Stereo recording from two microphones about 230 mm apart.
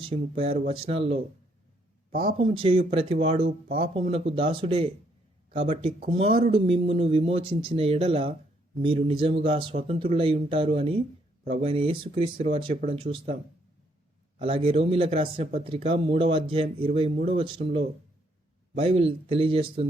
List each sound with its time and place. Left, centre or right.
0.0 s speech: right
2.4 s speech: right
14.3 s speech: right